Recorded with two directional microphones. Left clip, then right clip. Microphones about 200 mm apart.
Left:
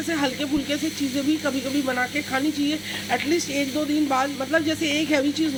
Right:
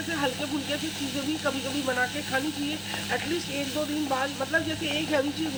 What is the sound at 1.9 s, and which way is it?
Speech, 25° left (ahead or behind).